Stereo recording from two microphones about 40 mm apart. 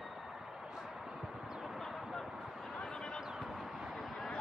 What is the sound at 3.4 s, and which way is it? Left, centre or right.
Vehicle, centre.